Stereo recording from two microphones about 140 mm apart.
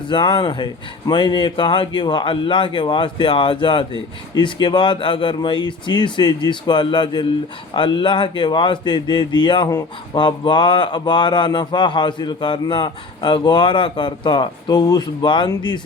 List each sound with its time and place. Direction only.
0.1 s speech: 35° left (ahead or behind)